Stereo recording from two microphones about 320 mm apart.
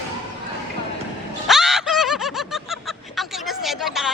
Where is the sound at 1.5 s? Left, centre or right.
Centre.